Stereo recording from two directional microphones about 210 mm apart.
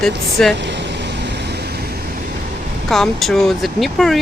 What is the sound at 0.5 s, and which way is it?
Vehicle, 55° right (ahead or behind).